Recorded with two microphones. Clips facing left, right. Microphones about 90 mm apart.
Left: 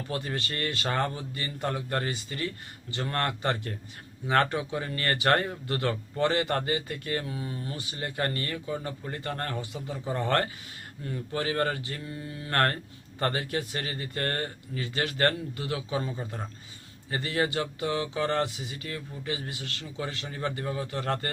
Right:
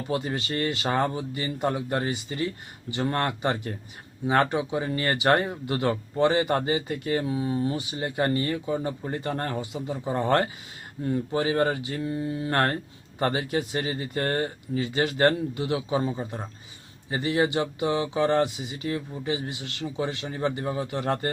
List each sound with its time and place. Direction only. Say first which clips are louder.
0.1 s speech: right 6 dB; 20° right (ahead or behind)